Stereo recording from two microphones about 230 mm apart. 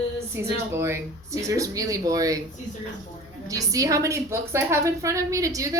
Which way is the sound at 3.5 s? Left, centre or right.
Centre.